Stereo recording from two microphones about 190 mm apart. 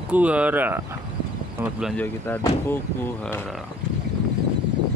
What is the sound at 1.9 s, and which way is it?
Speech, 10° left (ahead or behind).